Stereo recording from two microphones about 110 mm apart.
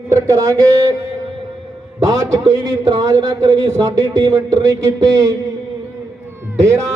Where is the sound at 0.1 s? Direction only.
30° right (ahead or behind).